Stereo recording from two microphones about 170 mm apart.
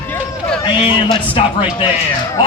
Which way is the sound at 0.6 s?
30° left (ahead or behind).